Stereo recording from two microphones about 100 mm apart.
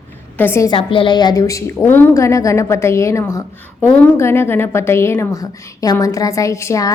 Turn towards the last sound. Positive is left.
turn(degrees=30)  # may be behind; listen again after turning